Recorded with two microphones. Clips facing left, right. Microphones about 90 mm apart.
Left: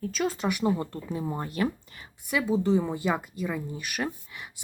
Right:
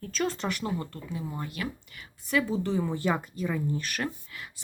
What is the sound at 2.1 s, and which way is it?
Speech, 15° left (ahead or behind).